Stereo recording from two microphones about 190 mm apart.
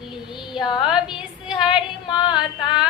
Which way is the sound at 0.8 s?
5° right (ahead or behind).